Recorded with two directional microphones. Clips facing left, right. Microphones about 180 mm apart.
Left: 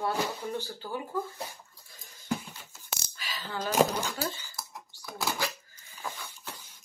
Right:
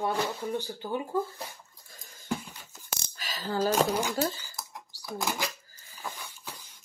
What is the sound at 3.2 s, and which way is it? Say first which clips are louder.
Coin: right 8 dB; 40° right (ahead or behind).